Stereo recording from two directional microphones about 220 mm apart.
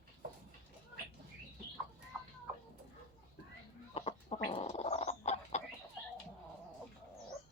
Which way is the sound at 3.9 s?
30° left (ahead or behind).